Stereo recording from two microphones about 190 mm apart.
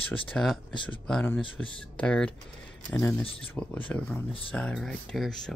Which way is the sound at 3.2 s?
30° left (ahead or behind).